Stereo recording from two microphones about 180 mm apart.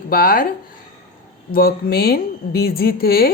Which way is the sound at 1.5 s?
55° left (ahead or behind).